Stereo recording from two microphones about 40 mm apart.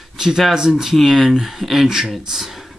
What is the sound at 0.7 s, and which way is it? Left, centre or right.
Speech, centre.